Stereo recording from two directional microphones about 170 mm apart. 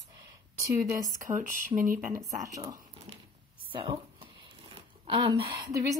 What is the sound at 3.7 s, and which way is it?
Speech, 30° right (ahead or behind).